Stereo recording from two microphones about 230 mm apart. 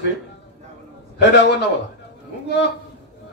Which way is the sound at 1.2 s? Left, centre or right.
Left.